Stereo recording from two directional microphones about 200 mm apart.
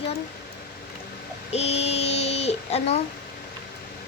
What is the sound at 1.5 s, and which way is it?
Child singing, 30° left (ahead or behind).